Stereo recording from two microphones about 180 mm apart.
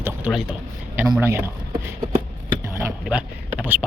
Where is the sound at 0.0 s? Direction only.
5° right (ahead or behind).